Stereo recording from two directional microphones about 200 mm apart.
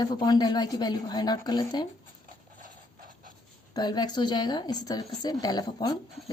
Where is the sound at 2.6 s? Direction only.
40° right (ahead or behind).